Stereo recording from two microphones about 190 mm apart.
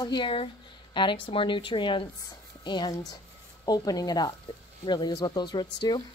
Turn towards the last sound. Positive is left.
turn(degrees=20)  # may be behind; listen again after turning